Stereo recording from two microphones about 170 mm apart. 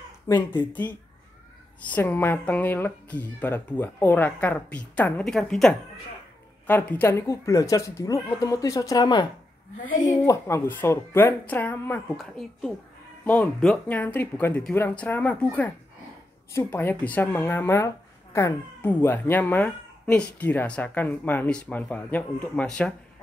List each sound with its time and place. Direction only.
0.5 s a woman's voice: 10° left (ahead or behind)
9.8 s a woman's voice: 50° left (ahead or behind)
10.2 s speech: 15° left (ahead or behind)